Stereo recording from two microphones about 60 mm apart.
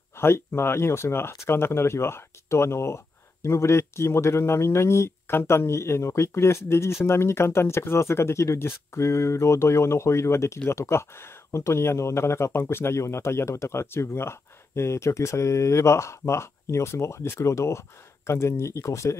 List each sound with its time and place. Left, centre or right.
0.2 s speech: left